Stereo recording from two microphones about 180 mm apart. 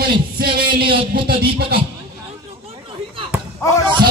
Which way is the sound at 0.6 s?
55° right (ahead or behind).